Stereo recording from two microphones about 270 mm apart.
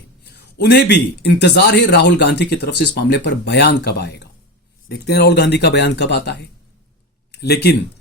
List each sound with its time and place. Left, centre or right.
0.3 s a man's voice: left